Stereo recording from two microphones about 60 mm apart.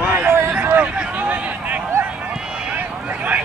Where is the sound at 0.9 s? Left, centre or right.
Right.